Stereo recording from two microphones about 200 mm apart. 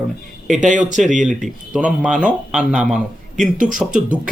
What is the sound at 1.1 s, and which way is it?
Speech, 40° right (ahead or behind).